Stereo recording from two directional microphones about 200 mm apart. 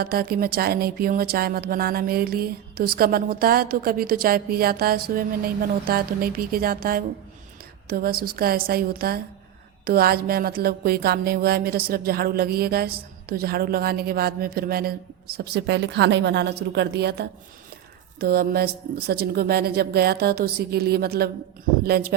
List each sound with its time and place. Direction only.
0.0 s a woman's voice: 50° right (ahead or behind)